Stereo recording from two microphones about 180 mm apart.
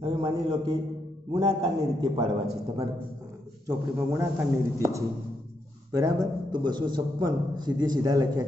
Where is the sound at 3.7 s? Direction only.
15° right (ahead or behind).